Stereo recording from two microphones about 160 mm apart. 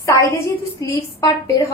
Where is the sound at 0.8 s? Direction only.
20° left (ahead or behind).